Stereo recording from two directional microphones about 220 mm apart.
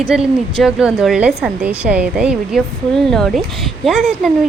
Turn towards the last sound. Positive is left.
turn(degrees=0)  # may be behind; listen again after turning